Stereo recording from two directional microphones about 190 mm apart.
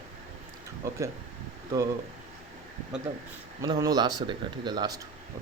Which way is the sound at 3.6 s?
20° right (ahead or behind).